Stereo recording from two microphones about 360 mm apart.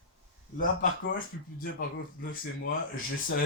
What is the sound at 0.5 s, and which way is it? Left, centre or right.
Speech, left.